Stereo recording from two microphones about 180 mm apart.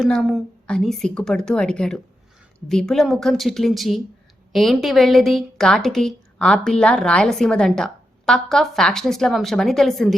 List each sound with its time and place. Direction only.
0.0 s a woman's voice: centre (ahead or behind)